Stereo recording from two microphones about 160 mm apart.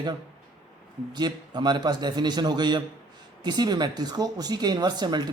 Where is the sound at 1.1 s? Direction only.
25° right (ahead or behind).